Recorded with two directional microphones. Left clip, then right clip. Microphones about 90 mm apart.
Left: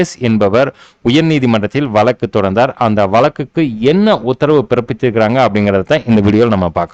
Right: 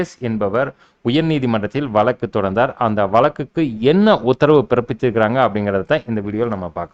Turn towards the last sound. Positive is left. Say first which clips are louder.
# left 10 dB
turn(degrees=35)  # may be behind; listen again after turning